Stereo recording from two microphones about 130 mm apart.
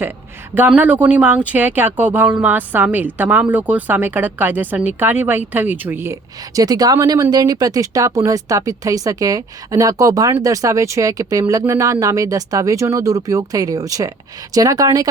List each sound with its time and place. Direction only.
0.7 s speech: 10° right (ahead or behind)
6.6 s speech: 30° right (ahead or behind)